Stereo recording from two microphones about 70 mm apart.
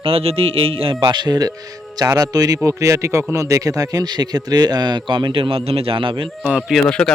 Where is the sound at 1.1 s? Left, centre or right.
Right.